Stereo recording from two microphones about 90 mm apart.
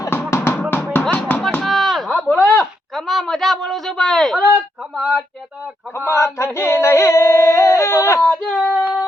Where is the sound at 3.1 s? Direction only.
Centre (ahead or behind).